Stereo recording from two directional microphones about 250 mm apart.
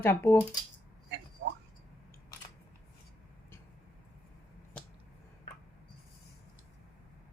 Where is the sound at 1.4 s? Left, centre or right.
Right.